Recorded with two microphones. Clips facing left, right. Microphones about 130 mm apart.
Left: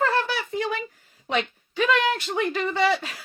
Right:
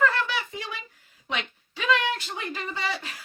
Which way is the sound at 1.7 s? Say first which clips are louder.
Left 4 dB; 55° left (ahead or behind).